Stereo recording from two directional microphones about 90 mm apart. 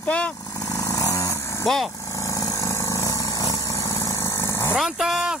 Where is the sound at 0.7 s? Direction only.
35° left (ahead or behind).